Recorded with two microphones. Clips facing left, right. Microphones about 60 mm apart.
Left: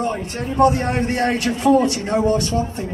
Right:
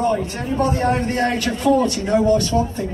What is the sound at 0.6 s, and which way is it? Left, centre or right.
A man's voice, centre.